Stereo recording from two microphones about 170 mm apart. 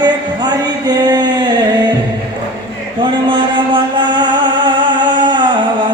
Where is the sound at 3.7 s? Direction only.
25° right (ahead or behind).